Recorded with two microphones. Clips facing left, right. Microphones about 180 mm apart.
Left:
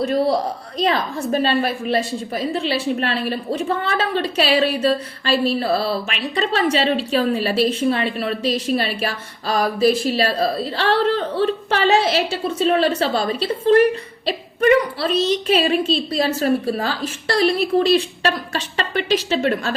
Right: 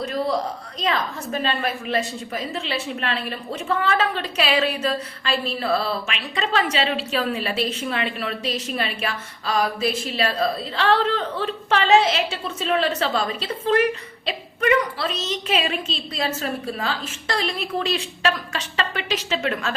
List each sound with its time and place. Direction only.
0.9 s a woman's voice: 35° left (ahead or behind)